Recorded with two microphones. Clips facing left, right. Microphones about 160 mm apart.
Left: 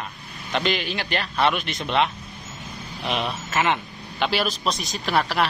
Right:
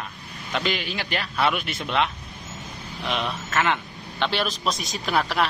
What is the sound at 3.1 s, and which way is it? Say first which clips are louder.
Speech: left 1 dB; 30° left (ahead or behind).